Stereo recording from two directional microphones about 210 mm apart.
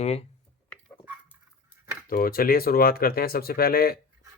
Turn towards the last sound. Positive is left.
turn(degrees=45)  # may be behind; listen again after turning